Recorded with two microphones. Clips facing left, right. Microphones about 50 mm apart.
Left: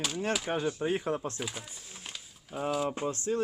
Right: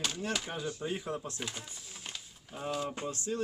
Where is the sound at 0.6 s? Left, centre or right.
Left.